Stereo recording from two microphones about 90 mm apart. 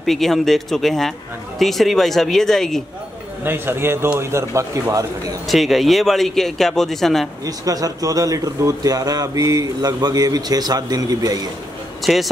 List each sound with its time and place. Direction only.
0.0 s speech: centre (ahead or behind)
3.4 s a man's voice: 25° right (ahead or behind)
5.5 s speech: centre (ahead or behind)
7.4 s a man's voice: 40° right (ahead or behind)
12.0 s speech: centre (ahead or behind)